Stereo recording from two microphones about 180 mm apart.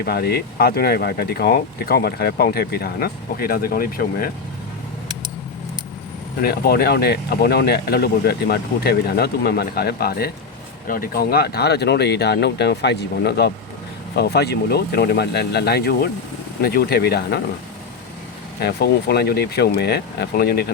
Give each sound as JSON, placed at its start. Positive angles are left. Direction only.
{"t": 0.0, "sound": "speech", "side_deg": 60}
{"t": 6.4, "sound": "speech", "side_deg": 60}
{"t": 18.6, "sound": "speech", "side_deg": 65}